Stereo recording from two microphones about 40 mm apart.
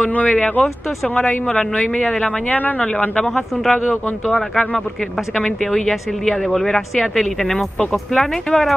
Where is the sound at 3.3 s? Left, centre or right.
Centre.